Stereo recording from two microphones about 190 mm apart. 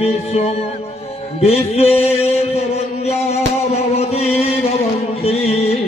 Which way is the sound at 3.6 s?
35° left (ahead or behind).